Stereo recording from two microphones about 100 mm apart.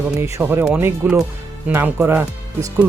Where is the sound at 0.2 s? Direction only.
25° right (ahead or behind).